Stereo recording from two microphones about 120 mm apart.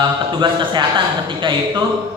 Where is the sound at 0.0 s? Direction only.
40° right (ahead or behind).